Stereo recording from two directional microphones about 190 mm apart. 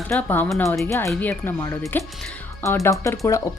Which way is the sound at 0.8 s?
15° left (ahead or behind).